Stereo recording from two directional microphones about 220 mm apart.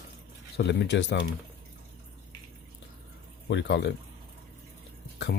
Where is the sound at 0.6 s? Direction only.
50° left (ahead or behind).